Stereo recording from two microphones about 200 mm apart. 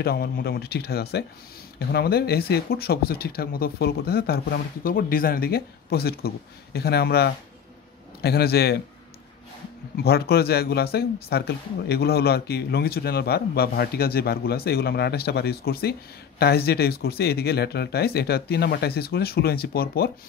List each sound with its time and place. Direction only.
0.0 s speech: 50° left (ahead or behind)
10.0 s speech: 50° left (ahead or behind)